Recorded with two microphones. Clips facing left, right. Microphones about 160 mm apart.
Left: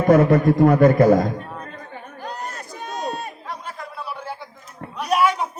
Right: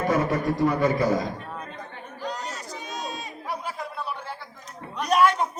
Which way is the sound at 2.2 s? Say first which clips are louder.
Even; 55° left (ahead or behind).